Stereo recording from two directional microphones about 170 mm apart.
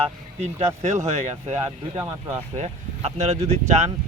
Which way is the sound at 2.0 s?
20° right (ahead or behind).